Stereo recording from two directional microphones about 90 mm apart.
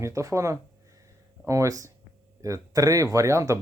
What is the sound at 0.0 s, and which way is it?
Speech, 35° right (ahead or behind).